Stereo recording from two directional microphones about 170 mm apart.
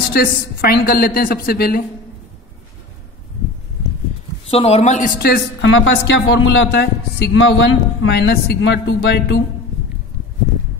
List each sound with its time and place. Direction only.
0.1 s a woman's voice: 65° left (ahead or behind)
4.5 s speech: 35° left (ahead or behind)
5.2 s a woman's voice: 80° left